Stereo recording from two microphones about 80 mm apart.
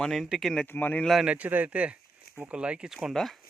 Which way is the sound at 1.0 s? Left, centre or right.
Centre.